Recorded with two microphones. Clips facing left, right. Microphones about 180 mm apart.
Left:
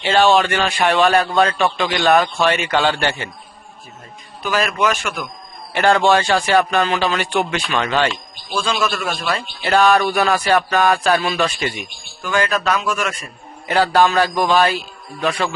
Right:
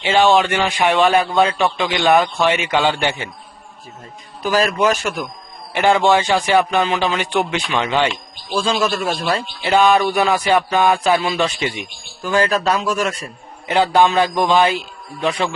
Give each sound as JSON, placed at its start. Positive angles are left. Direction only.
{"t": 0.0, "sound": "speech", "side_deg": -15}
{"t": 4.4, "sound": "a man's voice", "side_deg": -35}
{"t": 5.7, "sound": "speech", "side_deg": -15}
{"t": 9.6, "sound": "speech", "side_deg": -15}
{"t": 12.2, "sound": "a man's voice", "side_deg": -30}
{"t": 13.7, "sound": "speech", "side_deg": -20}